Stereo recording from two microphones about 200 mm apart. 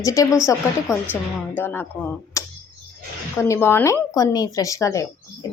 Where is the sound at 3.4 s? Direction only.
10° left (ahead or behind).